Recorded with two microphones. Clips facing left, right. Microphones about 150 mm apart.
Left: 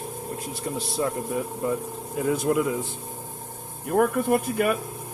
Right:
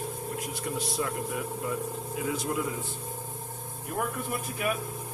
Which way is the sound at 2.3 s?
55° left (ahead or behind).